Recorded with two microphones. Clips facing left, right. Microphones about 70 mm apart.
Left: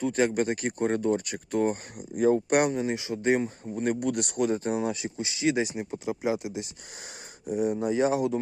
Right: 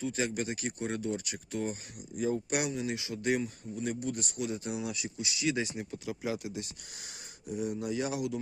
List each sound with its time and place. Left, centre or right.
0.0 s speech: left
3.8 s speech: left